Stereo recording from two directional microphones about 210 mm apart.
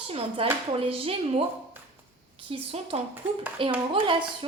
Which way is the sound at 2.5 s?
30° right (ahead or behind).